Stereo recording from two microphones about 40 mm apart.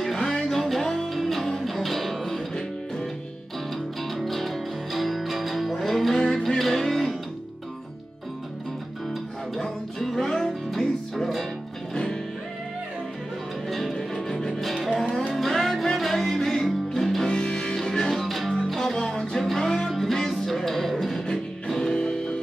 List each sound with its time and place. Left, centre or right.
0.0 s music: centre
3.7 s music: centre
9.6 s music: centre
11.9 s music: centre
13.7 s music: centre
17.3 s music: left
18.1 s music: centre
18.9 s music: centre
19.4 s music: centre
21.6 s music: centre